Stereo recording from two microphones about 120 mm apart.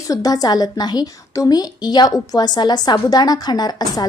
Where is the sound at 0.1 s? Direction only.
30° left (ahead or behind).